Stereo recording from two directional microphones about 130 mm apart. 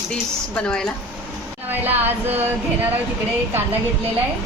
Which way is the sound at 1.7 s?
15° right (ahead or behind).